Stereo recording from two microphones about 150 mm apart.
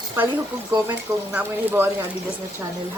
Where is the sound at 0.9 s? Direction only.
10° right (ahead or behind).